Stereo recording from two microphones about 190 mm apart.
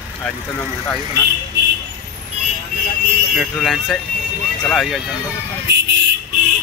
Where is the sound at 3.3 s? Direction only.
Centre (ahead or behind).